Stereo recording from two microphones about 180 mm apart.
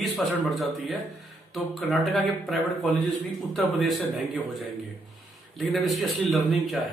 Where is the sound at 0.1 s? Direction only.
Centre (ahead or behind).